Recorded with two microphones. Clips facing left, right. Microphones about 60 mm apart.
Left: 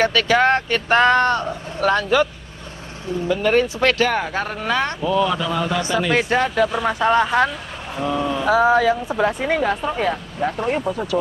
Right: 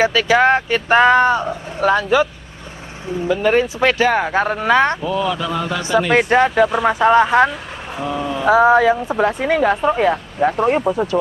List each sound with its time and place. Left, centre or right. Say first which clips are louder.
0.0 s speech: right 3 dB; centre
3.3 s speech: right 2 dB; centre
5.9 s speech: right 4 dB; right
6.1 s speech: right 5 dB; centre